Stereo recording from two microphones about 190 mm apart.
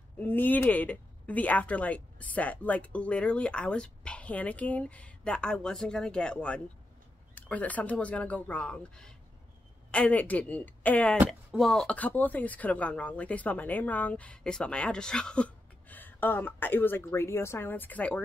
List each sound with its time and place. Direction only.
0.2 s speech: 10° left (ahead or behind)